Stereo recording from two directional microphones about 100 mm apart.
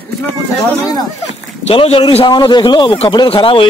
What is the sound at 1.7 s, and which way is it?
A man's voice, 70° left (ahead or behind).